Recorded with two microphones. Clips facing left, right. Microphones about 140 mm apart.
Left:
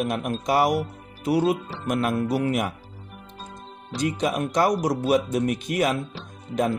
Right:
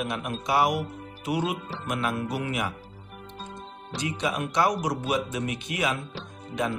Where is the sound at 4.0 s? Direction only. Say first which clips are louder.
Left 5 dB; 45° left (ahead or behind).